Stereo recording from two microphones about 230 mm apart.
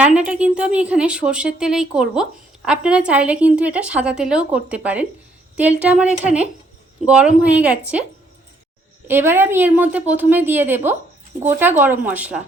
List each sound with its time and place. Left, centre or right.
0.0 s a woman's voice: centre
9.0 s a woman's voice: centre